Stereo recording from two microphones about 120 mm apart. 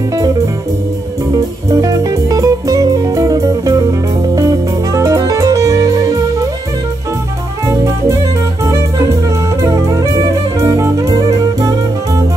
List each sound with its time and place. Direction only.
1.7 s music: 30° right (ahead or behind)
7.6 s music: 25° right (ahead or behind)